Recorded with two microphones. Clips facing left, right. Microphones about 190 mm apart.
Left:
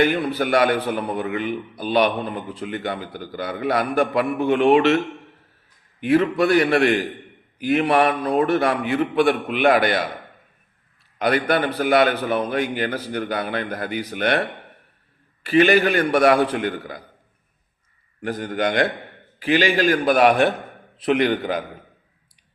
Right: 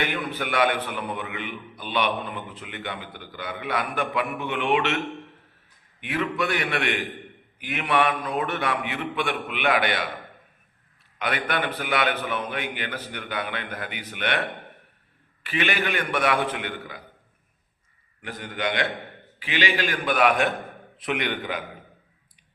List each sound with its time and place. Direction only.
0.0 s a man's voice: 35° left (ahead or behind)
6.0 s a man's voice: 35° left (ahead or behind)
11.2 s a man's voice: 40° left (ahead or behind)
15.4 s a man's voice: 40° left (ahead or behind)
18.2 s a man's voice: 45° left (ahead or behind)